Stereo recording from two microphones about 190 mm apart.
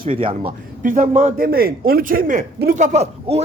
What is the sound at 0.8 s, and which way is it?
Speech, 45° right (ahead or behind).